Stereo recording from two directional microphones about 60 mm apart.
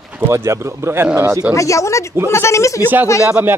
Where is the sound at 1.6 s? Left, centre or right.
Left.